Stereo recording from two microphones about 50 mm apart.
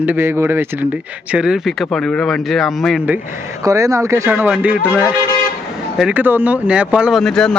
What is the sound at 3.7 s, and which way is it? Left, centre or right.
Speech, right.